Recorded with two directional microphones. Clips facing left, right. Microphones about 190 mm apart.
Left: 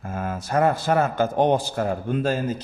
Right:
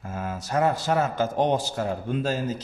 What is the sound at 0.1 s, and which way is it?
A man's voice, 55° left (ahead or behind).